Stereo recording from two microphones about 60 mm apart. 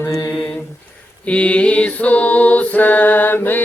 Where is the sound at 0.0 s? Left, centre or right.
Left.